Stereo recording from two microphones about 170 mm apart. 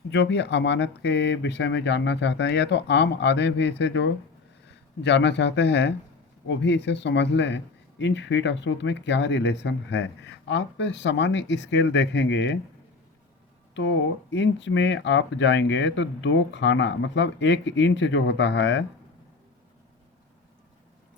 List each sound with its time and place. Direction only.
0.1 s speech: 90° left
13.7 s speech: 90° left